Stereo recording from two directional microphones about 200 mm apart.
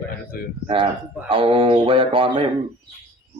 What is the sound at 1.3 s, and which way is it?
Speech, 25° right (ahead or behind).